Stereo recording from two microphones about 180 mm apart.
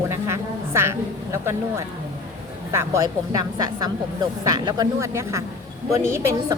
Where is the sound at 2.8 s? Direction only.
15° right (ahead or behind).